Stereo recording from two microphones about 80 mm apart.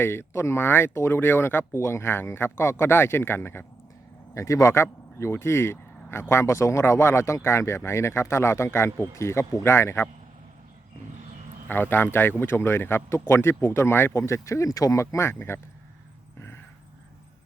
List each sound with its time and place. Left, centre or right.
0.0 s speech: left
11.7 s speech: left